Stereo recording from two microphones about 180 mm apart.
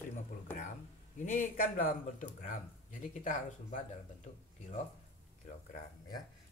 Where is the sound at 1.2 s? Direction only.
40° left (ahead or behind).